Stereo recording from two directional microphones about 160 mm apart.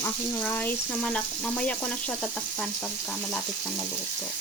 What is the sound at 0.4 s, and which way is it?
Frying, 10° left (ahead or behind).